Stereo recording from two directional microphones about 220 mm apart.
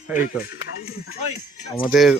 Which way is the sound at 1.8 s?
Centre (ahead or behind).